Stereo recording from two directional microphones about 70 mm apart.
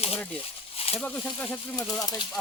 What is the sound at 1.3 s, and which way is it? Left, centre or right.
Speech, left.